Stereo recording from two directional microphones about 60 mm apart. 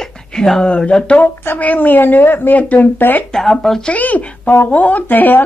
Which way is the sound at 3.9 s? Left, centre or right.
Left.